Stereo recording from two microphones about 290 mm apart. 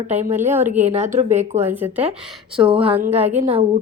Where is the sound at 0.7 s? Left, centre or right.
Right.